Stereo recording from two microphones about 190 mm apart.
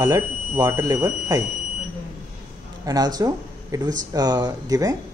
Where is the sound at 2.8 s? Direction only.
20° right (ahead or behind).